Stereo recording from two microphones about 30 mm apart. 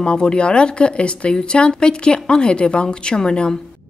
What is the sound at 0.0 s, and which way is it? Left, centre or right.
Speech, left.